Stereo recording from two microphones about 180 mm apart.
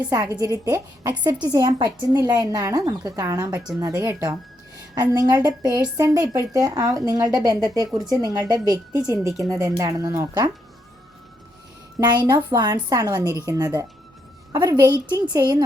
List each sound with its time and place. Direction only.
0.1 s speech: 20° right (ahead or behind)
11.9 s speech: 20° right (ahead or behind)